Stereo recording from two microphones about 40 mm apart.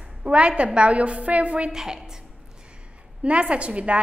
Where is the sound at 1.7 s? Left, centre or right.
Centre.